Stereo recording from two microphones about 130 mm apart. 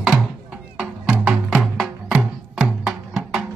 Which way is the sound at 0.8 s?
5° right (ahead or behind).